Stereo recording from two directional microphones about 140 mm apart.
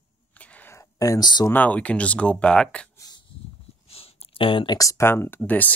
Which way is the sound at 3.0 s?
30° left (ahead or behind).